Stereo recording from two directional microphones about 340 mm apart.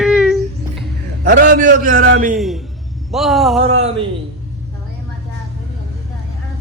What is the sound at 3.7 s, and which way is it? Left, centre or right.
Speech, centre.